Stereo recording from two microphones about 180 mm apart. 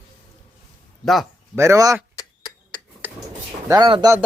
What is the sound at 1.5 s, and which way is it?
Speech, 15° right (ahead or behind).